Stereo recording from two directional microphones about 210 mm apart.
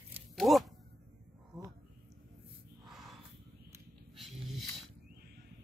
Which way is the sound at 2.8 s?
Centre (ahead or behind).